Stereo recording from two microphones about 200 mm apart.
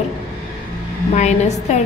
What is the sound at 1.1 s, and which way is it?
Speech, 35° left (ahead or behind).